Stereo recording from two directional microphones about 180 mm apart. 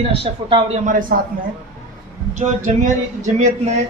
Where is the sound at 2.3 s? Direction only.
40° right (ahead or behind).